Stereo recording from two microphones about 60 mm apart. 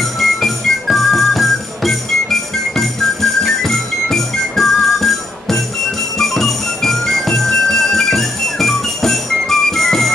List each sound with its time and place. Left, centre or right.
0.0 s music: centre
3.6 s music: centre